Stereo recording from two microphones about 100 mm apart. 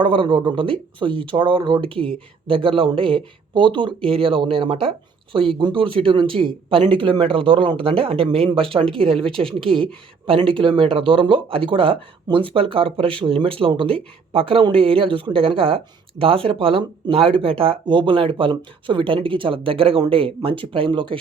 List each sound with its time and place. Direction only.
0.0 s speech: 55° right (ahead or behind)